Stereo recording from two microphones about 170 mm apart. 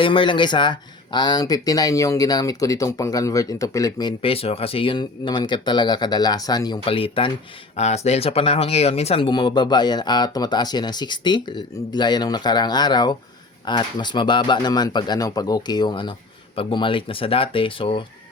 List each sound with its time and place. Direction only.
0.0 s speech: 30° left (ahead or behind)